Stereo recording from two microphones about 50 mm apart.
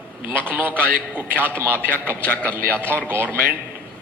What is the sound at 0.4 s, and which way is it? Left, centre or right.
A man's voice, right.